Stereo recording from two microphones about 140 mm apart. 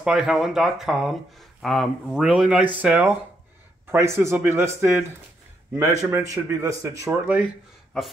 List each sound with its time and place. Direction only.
0.0 s speech: 5° right (ahead or behind); by 7.1 s 20° right (ahead or behind)
7.1 s speech: 10° right (ahead or behind)